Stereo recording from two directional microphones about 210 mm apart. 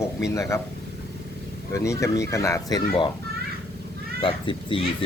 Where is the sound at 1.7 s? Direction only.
15° left (ahead or behind).